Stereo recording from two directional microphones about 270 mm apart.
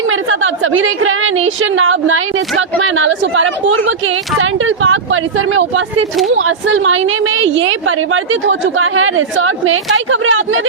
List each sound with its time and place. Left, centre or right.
0.1 s a woman's voice: right